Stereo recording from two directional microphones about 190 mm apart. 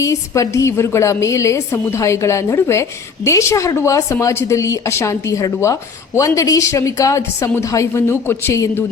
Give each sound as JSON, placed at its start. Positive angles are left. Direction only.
{"t": 0.0, "sound": "speech", "side_deg": 15}